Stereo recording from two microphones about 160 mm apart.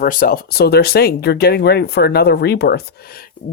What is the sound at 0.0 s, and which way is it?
Speech, 60° left (ahead or behind).